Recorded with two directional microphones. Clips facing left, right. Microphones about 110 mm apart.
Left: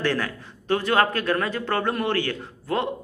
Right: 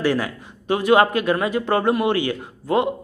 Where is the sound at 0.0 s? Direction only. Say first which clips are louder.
Right 4 dB; 10° right (ahead or behind).